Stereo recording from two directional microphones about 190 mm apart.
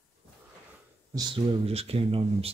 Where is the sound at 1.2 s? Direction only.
25° right (ahead or behind).